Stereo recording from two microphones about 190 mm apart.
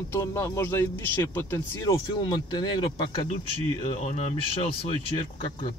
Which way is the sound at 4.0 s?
35° left (ahead or behind).